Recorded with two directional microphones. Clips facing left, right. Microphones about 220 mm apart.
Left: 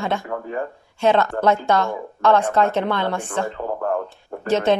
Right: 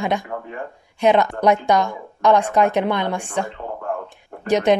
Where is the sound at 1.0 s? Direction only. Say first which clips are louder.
Right 1 dB; 15° right (ahead or behind).